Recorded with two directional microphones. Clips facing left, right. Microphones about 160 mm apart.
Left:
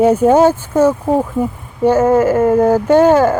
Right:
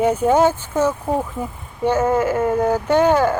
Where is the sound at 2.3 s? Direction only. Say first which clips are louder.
Left 7 dB; 10° left (ahead or behind).